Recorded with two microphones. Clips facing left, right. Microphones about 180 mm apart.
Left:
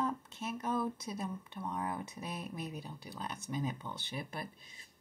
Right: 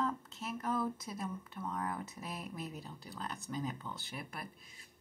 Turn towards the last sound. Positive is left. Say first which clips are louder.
# left 3 dB
turn(degrees=25)  # may be behind; listen again after turning